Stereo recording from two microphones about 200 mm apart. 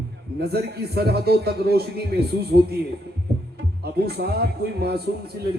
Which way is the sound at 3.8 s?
55° right (ahead or behind).